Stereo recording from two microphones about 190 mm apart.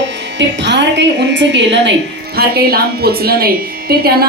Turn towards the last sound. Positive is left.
turn(degrees=-55)  # may be behind; listen again after turning